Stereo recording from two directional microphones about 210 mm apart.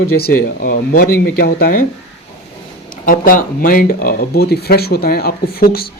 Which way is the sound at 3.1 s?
40° left (ahead or behind).